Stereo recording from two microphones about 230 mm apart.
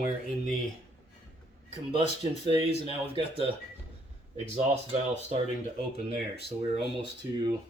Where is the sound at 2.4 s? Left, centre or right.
Right.